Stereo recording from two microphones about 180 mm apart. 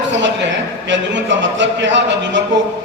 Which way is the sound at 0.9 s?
80° right.